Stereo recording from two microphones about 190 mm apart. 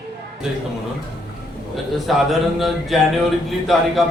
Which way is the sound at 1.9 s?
Centre (ahead or behind).